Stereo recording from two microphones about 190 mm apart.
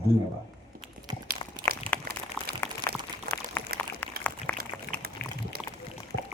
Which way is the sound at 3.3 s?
55° right (ahead or behind).